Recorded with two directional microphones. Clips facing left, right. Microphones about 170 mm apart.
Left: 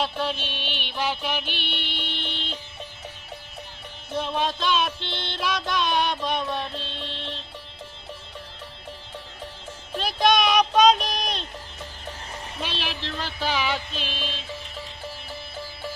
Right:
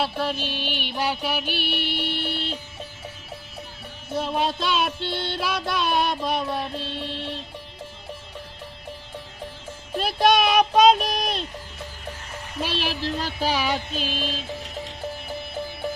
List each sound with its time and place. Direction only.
0.0 s music: 10° right (ahead or behind)
4.1 s music: 10° right (ahead or behind)
9.9 s music: 10° right (ahead or behind)
12.7 s speech: 40° right (ahead or behind)
13.6 s music: 45° right (ahead or behind)